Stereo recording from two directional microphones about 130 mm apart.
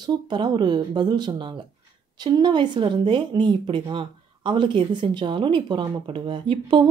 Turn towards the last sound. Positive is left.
turn(degrees=-40)  # may be behind; listen again after turning